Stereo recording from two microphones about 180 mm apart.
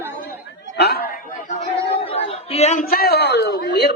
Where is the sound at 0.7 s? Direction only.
65° left (ahead or behind); by 1.7 s 45° left (ahead or behind).